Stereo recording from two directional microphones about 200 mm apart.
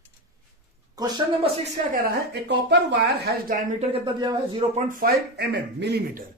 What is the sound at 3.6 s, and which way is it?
Speech, 40° right (ahead or behind).